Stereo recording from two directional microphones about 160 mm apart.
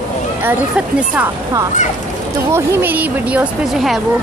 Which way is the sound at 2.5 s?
10° right (ahead or behind).